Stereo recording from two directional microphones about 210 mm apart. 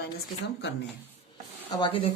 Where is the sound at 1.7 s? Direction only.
20° left (ahead or behind).